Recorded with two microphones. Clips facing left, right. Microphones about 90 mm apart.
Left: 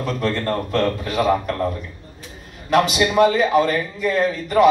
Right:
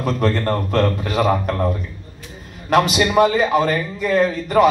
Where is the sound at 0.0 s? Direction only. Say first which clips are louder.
Right 3 dB; 55° right (ahead or behind).